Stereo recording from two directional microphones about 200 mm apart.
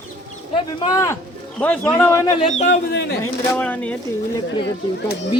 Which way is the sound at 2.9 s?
55° left (ahead or behind).